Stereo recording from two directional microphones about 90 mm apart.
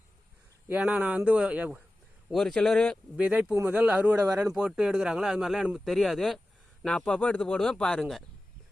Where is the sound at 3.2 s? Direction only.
15° right (ahead or behind).